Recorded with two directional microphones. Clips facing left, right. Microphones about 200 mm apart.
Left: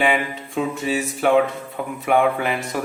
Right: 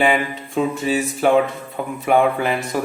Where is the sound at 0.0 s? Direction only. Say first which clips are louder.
Right 2 dB; 35° right (ahead or behind).